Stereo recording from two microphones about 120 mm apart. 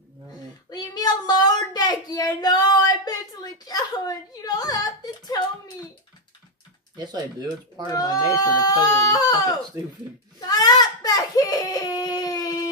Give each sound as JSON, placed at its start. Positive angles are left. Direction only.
{"t": 0.7, "sound": "a sound", "side_deg": 35}
{"t": 7.0, "sound": "speech", "side_deg": -35}
{"t": 7.8, "sound": "speech", "side_deg": 35}
{"t": 10.4, "sound": "baby cry", "side_deg": 35}